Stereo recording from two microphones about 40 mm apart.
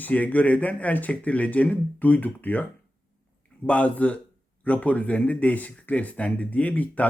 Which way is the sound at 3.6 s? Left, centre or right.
Left.